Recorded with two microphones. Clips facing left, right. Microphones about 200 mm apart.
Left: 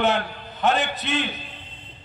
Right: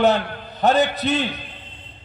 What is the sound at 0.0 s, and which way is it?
A man's voice, 35° right (ahead or behind).